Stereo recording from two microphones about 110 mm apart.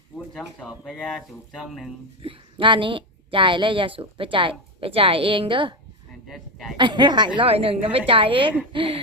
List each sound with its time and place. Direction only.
0.9 s speech: centre (ahead or behind)
2.2 s a woman's voice: 50° right (ahead or behind)
6.2 s a sound: centre (ahead or behind)
6.7 s a woman's voice: 45° right (ahead or behind)
7.3 s a woman's voice: 60° right (ahead or behind)